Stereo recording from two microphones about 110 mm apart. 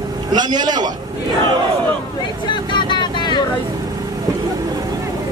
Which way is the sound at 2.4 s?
45° left (ahead or behind).